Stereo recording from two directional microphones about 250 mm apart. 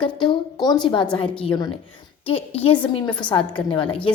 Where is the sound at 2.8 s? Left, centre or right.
Centre.